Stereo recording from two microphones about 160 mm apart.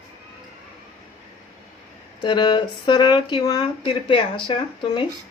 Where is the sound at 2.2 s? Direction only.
25° left (ahead or behind).